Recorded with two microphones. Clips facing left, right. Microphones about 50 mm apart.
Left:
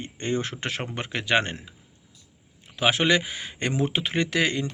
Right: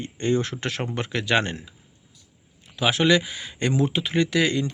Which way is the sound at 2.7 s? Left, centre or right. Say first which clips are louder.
Right 2 dB; left.